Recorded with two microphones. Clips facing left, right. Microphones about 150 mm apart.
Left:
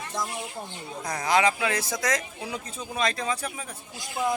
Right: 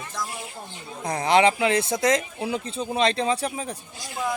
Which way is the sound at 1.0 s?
30° right (ahead or behind).